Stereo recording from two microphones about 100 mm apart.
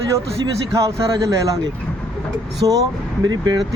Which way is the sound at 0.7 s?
30° right (ahead or behind).